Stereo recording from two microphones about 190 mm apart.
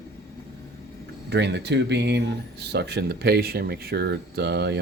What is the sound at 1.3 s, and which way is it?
Speech, 65° right (ahead or behind).